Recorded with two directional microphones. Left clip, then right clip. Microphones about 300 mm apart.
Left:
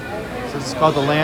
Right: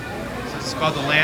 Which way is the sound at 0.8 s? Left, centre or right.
Centre.